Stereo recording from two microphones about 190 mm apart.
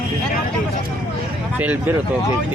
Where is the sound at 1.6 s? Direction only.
10° right (ahead or behind).